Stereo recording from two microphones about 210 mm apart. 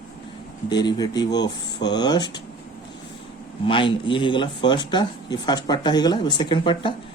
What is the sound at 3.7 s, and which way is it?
Speech, 25° left (ahead or behind).